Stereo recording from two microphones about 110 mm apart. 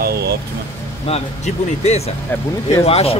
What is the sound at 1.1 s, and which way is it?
Speech, 65° left (ahead or behind).